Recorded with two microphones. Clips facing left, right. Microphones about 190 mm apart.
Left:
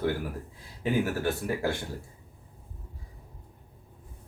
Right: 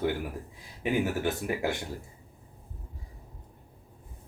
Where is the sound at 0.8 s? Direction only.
20° right (ahead or behind).